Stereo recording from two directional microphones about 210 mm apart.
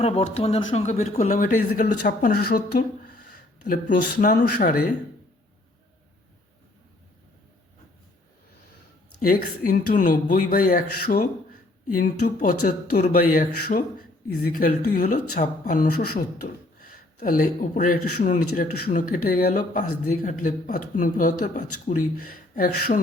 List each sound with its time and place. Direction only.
0.0 s speech: 30° left (ahead or behind); by 4.9 s 45° left (ahead or behind)
9.2 s speech: 40° left (ahead or behind)
21.9 s speech: 30° left (ahead or behind)
22.5 s speech: 40° left (ahead or behind)